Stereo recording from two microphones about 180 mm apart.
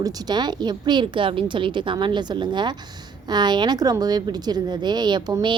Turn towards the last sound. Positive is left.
turn(degrees=-25)  # may be behind; listen again after turning